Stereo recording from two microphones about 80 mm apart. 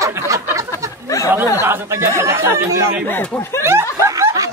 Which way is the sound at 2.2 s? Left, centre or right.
Right.